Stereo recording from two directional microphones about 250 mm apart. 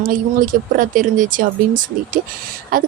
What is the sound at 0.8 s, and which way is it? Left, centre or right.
A woman's voice, right.